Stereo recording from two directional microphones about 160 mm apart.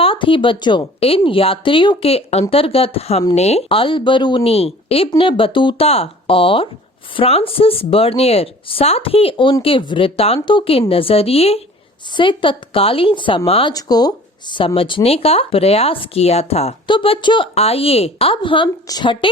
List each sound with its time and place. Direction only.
0.0 s speech: 35° left (ahead or behind)
13.7 s speech: 25° left (ahead or behind)